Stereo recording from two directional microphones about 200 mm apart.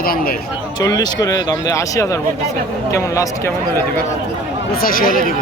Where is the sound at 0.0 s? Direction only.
50° left (ahead or behind).